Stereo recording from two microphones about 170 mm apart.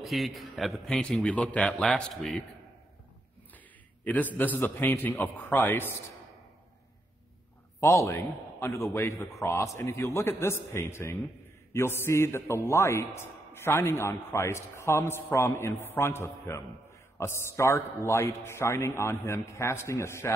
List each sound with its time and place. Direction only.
0.0 s a man's voice: centre (ahead or behind)
3.5 s a man's voice: 10° left (ahead or behind)
7.8 s a man's voice: 15° left (ahead or behind)